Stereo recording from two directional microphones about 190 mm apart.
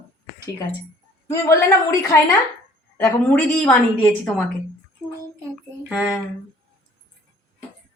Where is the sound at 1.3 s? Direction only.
15° left (ahead or behind).